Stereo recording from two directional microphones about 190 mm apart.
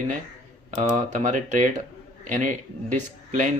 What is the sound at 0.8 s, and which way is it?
Speech, 40° right (ahead or behind).